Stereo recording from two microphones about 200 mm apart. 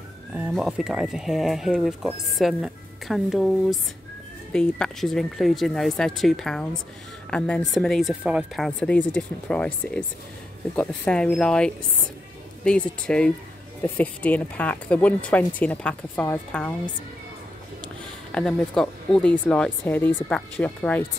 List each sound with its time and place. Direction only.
0.5 s speech: centre (ahead or behind)
18.3 s speech: 5° left (ahead or behind)